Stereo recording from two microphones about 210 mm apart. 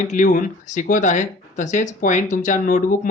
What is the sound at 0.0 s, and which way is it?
Speech, 40° left (ahead or behind).